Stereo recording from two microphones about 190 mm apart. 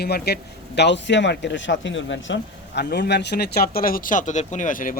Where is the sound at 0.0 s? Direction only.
55° left (ahead or behind).